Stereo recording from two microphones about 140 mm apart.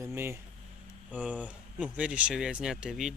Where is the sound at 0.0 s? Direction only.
20° right (ahead or behind).